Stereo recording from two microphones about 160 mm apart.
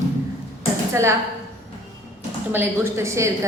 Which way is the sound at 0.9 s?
15° right (ahead or behind).